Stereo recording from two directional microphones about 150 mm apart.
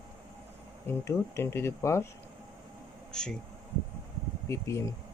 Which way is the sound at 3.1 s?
5° left (ahead or behind).